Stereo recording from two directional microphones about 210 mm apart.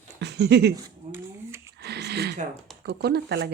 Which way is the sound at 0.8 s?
10° right (ahead or behind).